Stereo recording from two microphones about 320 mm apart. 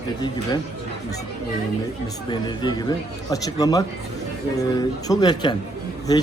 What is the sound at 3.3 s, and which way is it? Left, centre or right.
Speech, centre.